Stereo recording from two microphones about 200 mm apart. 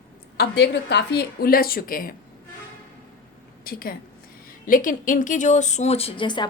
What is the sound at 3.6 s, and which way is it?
A woman's voice, 45° left (ahead or behind).